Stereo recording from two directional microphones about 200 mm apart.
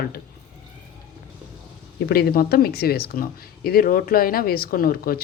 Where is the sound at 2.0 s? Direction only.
50° left (ahead or behind).